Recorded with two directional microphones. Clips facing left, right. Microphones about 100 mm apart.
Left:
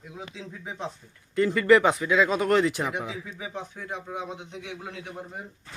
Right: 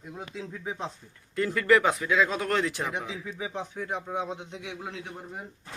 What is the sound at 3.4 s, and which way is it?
Speech, 15° right (ahead or behind).